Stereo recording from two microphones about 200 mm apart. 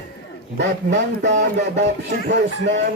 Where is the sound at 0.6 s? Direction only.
60° right (ahead or behind).